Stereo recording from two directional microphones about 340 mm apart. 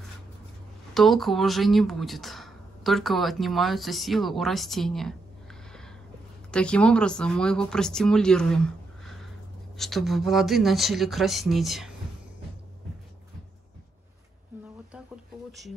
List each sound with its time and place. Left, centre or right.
0.9 s speech: centre